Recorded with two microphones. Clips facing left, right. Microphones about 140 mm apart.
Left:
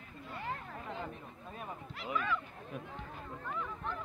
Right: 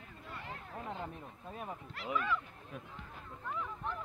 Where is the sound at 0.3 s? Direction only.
Centre (ahead or behind).